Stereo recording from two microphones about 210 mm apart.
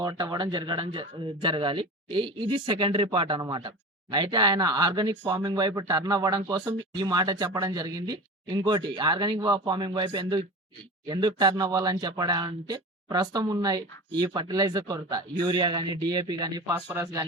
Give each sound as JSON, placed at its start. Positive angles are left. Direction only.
{"t": 0.0, "sound": "speech", "side_deg": -20}